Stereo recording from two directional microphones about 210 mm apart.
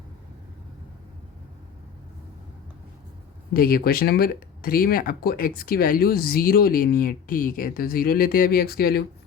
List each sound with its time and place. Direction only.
3.5 s speech: 45° left (ahead or behind)